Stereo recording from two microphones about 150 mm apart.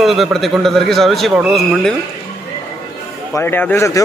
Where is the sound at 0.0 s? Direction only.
Centre (ahead or behind).